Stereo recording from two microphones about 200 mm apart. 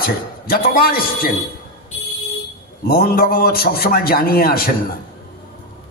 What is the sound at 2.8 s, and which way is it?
A man's voice, 50° left (ahead or behind).